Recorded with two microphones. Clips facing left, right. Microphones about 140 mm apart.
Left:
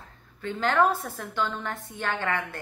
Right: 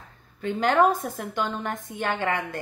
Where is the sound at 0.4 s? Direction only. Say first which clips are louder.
Right 3 dB; 15° right (ahead or behind).